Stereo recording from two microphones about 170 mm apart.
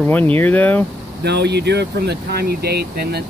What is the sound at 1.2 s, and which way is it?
Speech, 80° right.